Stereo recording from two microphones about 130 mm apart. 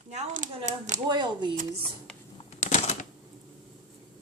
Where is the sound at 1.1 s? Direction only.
35° right (ahead or behind).